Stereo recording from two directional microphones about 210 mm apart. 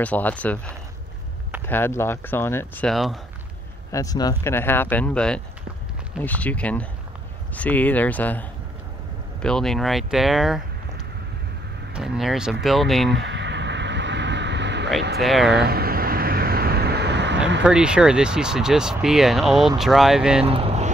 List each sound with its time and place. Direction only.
0.0 s speech: 5° left (ahead or behind)
3.9 s speech: 15° left (ahead or behind); by 10.6 s centre (ahead or behind)
11.9 s speech: centre (ahead or behind)
13.1 s a sound: 55° right (ahead or behind)
15.1 s speech: centre (ahead or behind)
15.6 s vehicle: 45° right (ahead or behind)
17.6 s speech: 5° right (ahead or behind)
20.4 s vehicle: 25° right (ahead or behind)